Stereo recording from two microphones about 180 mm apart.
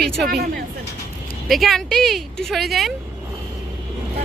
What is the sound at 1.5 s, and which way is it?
Speech, centre (ahead or behind).